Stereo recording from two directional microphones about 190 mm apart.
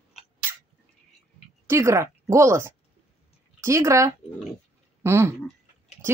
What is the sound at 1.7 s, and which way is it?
Speech, 15° right (ahead or behind).